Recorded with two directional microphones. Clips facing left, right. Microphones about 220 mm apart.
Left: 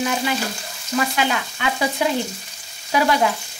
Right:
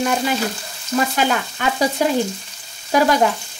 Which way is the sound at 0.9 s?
45° right (ahead or behind).